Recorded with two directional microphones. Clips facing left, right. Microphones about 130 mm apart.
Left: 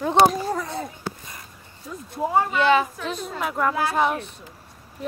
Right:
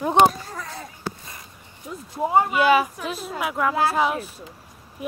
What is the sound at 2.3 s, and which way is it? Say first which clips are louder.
Speech: right 1 dB; 10° right (ahead or behind).